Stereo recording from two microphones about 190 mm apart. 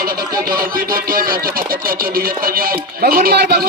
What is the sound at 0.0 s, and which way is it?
Honk, 50° right (ahead or behind).